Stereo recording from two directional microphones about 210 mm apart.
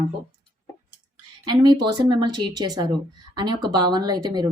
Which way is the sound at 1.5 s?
20° right (ahead or behind).